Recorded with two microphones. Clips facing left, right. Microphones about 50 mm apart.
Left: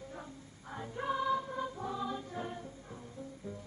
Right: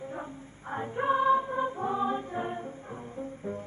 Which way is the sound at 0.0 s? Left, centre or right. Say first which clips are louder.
Right 8 dB; right.